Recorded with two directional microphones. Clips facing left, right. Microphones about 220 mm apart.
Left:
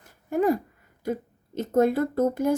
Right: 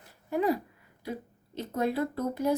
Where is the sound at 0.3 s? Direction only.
50° left (ahead or behind).